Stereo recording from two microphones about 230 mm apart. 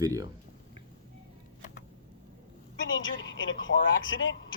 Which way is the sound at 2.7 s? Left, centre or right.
Left.